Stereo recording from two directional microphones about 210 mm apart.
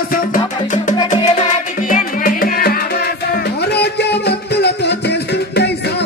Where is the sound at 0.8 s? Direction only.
35° left (ahead or behind).